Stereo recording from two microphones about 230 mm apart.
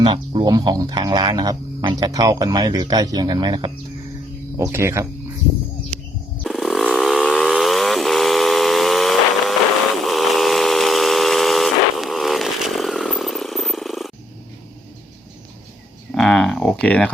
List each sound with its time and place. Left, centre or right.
0.0 s speech: right
6.4 s vehicle: centre
10.1 s steam whistle: centre
16.1 s a sound: centre